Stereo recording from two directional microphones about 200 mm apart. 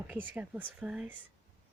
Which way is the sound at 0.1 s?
10° right (ahead or behind).